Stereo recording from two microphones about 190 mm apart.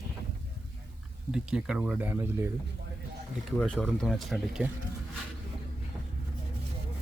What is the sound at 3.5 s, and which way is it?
Speech, 5° left (ahead or behind).